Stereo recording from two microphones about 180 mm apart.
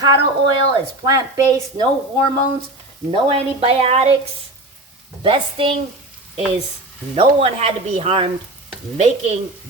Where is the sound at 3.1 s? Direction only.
30° right (ahead or behind).